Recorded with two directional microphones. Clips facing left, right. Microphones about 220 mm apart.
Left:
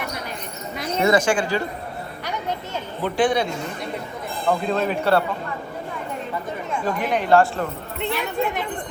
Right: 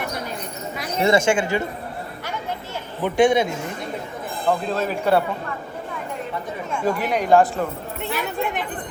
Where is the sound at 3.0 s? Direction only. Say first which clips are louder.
Right 3 dB; 20° right (ahead or behind).